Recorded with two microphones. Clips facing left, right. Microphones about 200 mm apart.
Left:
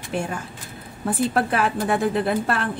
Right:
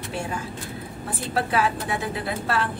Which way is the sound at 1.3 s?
50° left (ahead or behind).